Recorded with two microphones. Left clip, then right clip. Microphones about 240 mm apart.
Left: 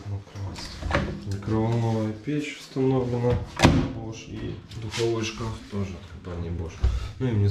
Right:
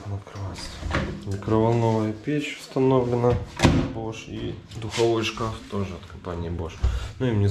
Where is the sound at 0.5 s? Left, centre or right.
Centre.